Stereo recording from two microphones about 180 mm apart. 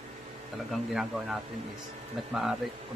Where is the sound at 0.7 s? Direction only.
Centre (ahead or behind).